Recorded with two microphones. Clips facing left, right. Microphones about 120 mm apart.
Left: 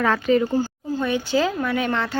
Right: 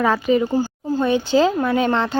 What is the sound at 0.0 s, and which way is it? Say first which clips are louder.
Speech: right 2 dB; 10° right (ahead or behind).